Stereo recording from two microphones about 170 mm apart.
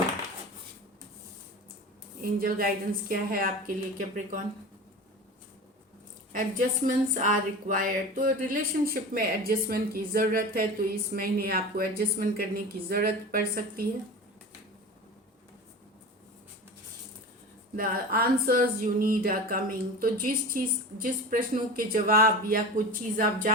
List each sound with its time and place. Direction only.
2.4 s speech: 60° right (ahead or behind)
6.3 s speech: 50° right (ahead or behind)
17.7 s speech: 60° right (ahead or behind)